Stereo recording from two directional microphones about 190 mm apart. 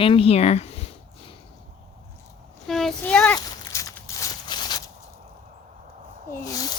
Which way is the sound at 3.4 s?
15° left (ahead or behind).